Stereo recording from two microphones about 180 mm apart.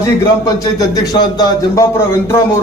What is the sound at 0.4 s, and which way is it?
A man's voice, 20° left (ahead or behind).